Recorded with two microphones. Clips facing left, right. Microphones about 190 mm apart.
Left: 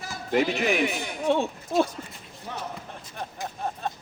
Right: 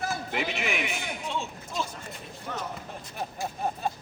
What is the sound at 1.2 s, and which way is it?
Speech, 60° left (ahead or behind).